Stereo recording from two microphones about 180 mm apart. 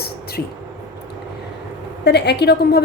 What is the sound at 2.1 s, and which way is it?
Speech, 65° left (ahead or behind).